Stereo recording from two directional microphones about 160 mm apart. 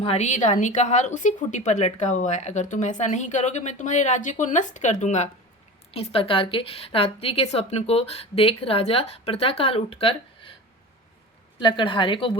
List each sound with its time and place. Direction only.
0.0 s a woman's voice: 40° left (ahead or behind)
11.6 s a woman's voice: 30° left (ahead or behind)